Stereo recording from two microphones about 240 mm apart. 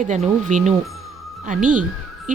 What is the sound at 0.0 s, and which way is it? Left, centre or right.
Speech, right.